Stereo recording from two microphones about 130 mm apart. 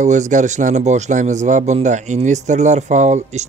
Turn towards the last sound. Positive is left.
turn(degrees=-65)  # may be behind; listen again after turning